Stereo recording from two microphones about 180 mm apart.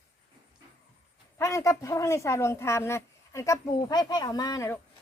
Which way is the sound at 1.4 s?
15° left (ahead or behind).